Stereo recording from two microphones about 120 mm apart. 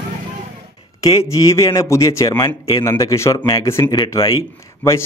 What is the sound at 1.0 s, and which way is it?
Speech, 30° left (ahead or behind).